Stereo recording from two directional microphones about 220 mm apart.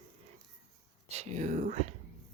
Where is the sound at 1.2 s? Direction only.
30° right (ahead or behind).